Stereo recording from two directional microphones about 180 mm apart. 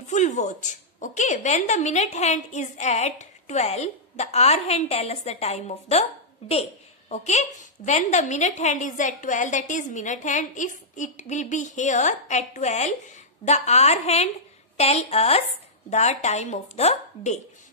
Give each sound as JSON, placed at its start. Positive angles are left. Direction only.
{"t": 0.1, "sound": "a woman's voice", "side_deg": 40}